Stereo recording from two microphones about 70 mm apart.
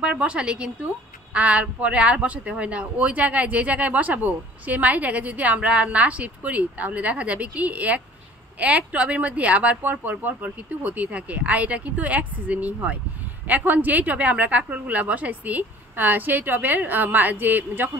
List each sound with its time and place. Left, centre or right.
0.0 s a woman's voice: centre